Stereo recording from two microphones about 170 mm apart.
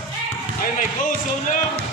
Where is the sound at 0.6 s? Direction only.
50° left (ahead or behind).